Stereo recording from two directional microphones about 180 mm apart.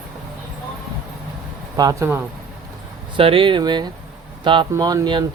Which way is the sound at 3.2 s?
30° right (ahead or behind).